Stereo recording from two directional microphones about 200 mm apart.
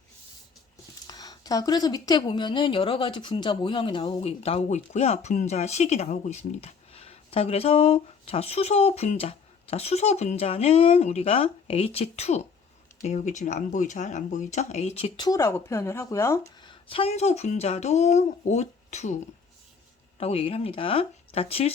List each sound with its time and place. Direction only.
1.0 s speech: 20° left (ahead or behind); by 19.1 s 35° left (ahead or behind)
20.1 s speech: 30° left (ahead or behind)